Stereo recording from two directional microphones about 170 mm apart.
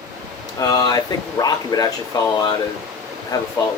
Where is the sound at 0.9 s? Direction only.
20° left (ahead or behind).